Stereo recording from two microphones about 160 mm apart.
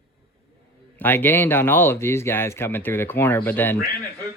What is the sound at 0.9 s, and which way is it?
A man's voice, 10° left (ahead or behind).